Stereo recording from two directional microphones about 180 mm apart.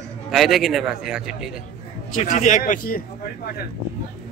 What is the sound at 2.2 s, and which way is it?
Speech, 40° left (ahead or behind).